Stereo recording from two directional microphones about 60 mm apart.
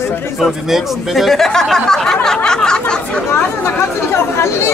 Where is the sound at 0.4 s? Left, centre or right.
Centre.